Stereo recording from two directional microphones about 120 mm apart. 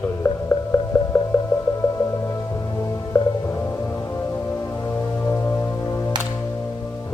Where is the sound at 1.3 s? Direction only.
15° left (ahead or behind).